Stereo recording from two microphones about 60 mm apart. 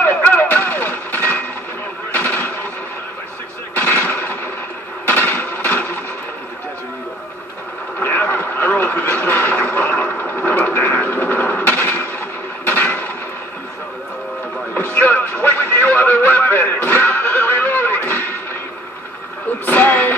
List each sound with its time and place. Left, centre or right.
0.0 s vehicle: left
2.1 s television: left
3.7 s gunshot: left
5.0 s a sound: left
8.0 s radio: left
10.2 s a sound: left
14.7 s music: left
19.6 s music: left